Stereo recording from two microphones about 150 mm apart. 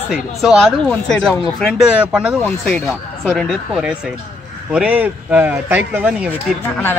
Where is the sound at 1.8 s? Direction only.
5° right (ahead or behind).